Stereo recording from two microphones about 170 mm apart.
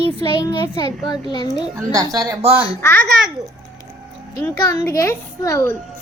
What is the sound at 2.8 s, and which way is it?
Speech, 10° left (ahead or behind).